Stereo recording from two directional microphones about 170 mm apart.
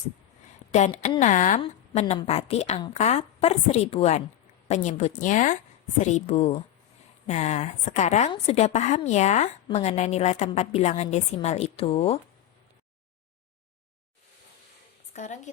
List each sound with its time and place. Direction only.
0.7 s a woman's voice: 45° left (ahead or behind)
15.1 s a woman's voice: 45° left (ahead or behind)